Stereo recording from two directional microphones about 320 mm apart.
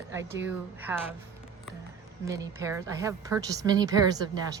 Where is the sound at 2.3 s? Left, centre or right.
Centre.